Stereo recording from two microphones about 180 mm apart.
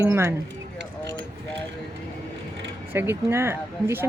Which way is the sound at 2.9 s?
15° right (ahead or behind).